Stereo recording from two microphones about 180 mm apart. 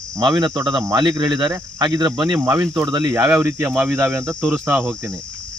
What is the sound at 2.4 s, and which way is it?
Cricket, 15° right (ahead or behind).